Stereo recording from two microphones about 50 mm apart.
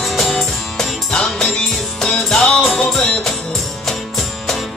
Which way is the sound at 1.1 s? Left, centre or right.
Centre.